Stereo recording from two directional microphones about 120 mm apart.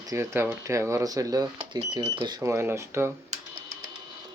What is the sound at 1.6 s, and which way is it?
Speech, 40° right (ahead or behind).